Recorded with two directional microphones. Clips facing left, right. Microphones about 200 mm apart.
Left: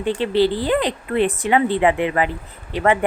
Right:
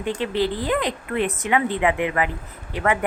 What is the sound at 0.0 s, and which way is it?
Speech, 30° left (ahead or behind).